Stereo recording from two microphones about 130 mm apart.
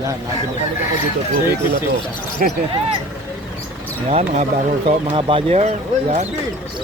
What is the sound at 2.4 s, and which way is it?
Speech, 90° right.